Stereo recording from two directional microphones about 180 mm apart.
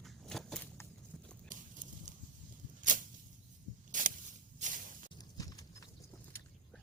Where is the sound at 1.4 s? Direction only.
45° right (ahead or behind).